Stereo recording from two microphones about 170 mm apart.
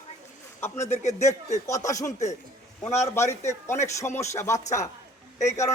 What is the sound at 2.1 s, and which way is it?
Speech, 45° left (ahead or behind).